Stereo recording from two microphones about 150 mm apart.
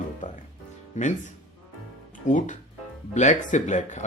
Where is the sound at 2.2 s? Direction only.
55° left (ahead or behind).